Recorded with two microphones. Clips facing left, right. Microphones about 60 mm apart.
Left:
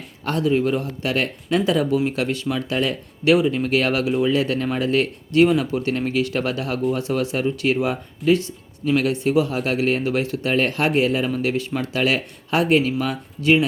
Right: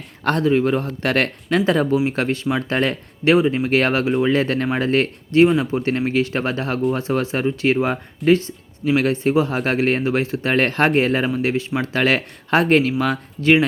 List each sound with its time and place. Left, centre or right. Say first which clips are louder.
0.3 s speech: right 3 dB; right
11.4 s speech: right 2 dB; right
11.9 s speech: right 2 dB; right